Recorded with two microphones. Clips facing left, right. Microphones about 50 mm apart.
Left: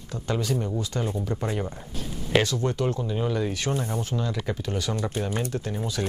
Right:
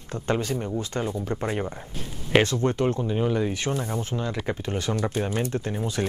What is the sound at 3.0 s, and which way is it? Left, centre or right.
Speech, centre.